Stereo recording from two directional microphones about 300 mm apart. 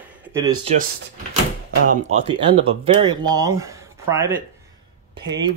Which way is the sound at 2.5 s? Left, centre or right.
Centre.